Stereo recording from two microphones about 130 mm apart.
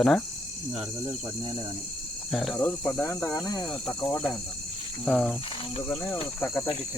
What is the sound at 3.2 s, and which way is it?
Speech, 20° left (ahead or behind).